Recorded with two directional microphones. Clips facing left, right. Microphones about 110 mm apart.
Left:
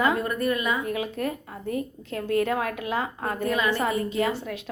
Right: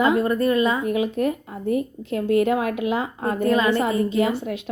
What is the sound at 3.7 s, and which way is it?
Speech, 20° right (ahead or behind).